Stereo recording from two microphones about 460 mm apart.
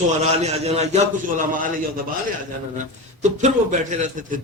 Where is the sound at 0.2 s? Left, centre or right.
Centre.